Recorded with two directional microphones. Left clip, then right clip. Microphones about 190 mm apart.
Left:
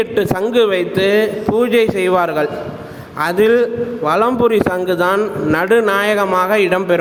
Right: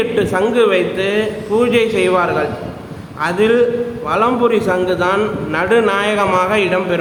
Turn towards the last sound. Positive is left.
turn(degrees=35)  # may be behind; listen again after turning